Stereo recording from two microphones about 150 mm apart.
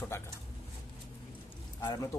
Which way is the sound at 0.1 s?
15° left (ahead or behind).